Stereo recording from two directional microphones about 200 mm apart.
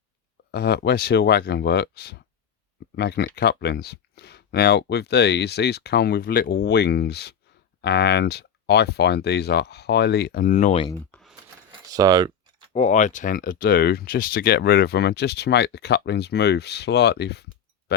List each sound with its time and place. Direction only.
0.5 s speech: 55° left (ahead or behind); by 10.8 s 35° left (ahead or behind)
10.8 s speech: 10° left (ahead or behind)
11.7 s a sound: 20° right (ahead or behind)
12.7 s speech: 35° left (ahead or behind); by 17.9 s 55° left (ahead or behind)